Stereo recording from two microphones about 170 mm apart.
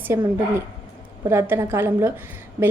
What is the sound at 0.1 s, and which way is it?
A woman's voice, 15° right (ahead or behind).